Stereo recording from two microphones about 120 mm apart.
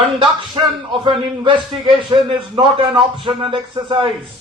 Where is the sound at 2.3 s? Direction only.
50° right (ahead or behind).